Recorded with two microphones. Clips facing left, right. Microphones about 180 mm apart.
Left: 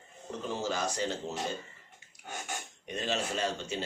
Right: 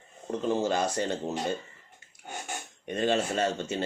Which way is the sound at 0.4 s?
55° right (ahead or behind).